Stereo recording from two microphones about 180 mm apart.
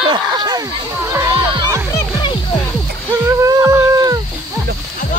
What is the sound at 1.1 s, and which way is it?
Music, 15° right (ahead or behind).